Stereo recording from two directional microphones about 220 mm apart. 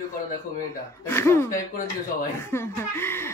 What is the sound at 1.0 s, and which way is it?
A woman's voice, 10° left (ahead or behind).